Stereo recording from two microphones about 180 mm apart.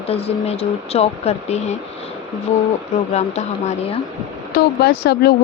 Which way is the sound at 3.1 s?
40° left (ahead or behind).